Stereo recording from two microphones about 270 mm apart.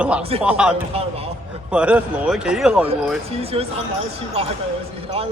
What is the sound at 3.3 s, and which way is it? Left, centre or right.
Speech, right.